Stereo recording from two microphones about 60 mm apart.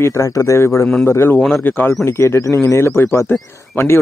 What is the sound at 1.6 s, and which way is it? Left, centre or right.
Speech, left.